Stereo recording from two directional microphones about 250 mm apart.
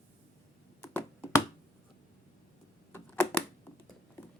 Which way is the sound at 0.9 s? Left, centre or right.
Centre.